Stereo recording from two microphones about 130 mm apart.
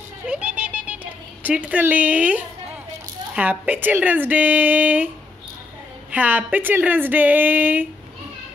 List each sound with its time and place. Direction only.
0.3 s a sound: 10° right (ahead or behind)
1.4 s a woman's voice: 10° right (ahead or behind)
6.1 s a woman's voice: 10° right (ahead or behind)